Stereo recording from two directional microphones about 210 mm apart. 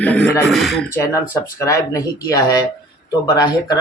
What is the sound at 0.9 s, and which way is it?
A man's voice, 15° left (ahead or behind).